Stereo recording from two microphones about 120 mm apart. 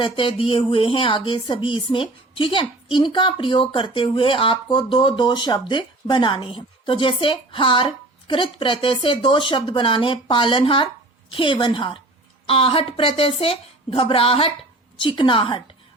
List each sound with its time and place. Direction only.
0.0 s speech: 45° left (ahead or behind)